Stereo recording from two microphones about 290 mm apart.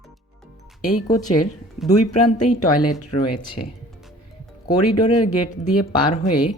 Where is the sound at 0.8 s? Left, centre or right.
Left.